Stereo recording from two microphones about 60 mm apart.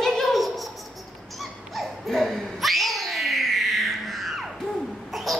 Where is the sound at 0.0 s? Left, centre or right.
Centre.